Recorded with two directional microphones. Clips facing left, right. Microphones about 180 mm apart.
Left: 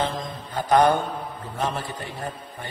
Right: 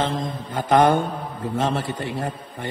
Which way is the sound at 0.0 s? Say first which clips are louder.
Right 3 dB; 25° right (ahead or behind).